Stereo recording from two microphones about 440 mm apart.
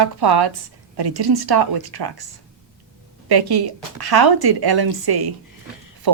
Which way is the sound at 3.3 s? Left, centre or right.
Right.